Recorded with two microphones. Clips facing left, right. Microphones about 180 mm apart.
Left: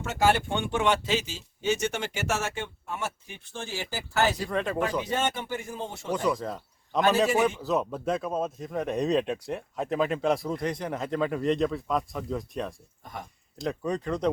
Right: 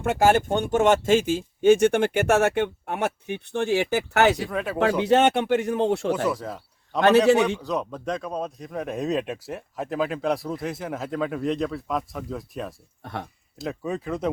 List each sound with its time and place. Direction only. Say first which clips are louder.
0.0 s speech: right 5 dB; 55° right (ahead or behind); by 4.4 s 70° right (ahead or behind)
4.4 s speech: right 1 dB; 5° right (ahead or behind)
4.8 s speech: right 13 dB; 75° right (ahead or behind)
6.2 s a man's voice: right 1 dB; 5° right (ahead or behind)
13.0 s speech: right 7 dB; 70° right (ahead or behind)
13.6 s speech: even; 5° right (ahead or behind)